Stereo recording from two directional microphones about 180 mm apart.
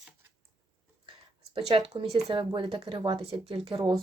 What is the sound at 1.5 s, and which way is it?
A woman's voice, 30° right (ahead or behind).